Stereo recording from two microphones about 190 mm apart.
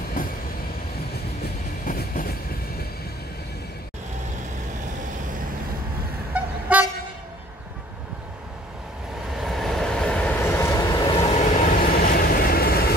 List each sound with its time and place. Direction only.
1.9 s train: 50° left (ahead or behind)
6.3 s toot: 10° right (ahead or behind)
9.4 s vehicle: centre (ahead or behind); by 11.1 s 20° left (ahead or behind)
11.3 s vehicle: 45° left (ahead or behind)